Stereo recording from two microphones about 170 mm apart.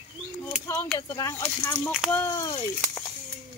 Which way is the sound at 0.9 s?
20° left (ahead or behind).